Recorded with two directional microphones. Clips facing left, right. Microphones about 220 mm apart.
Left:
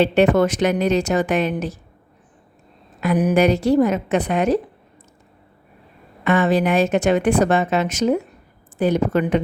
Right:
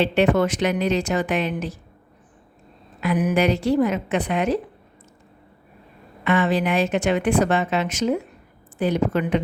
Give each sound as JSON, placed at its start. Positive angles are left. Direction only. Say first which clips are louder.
{"t": 0.0, "sound": "a woman's voice", "louder": "left 3 dB", "side_deg": 40}
{"t": 3.0, "sound": "a woman's voice", "louder": "left 4 dB", "side_deg": 40}
{"t": 6.2, "sound": "a woman's voice", "louder": "left 3 dB", "side_deg": 45}